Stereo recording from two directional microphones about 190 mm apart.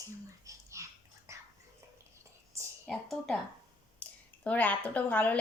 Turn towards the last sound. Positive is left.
turn(degrees=10)  # may be behind; listen again after turning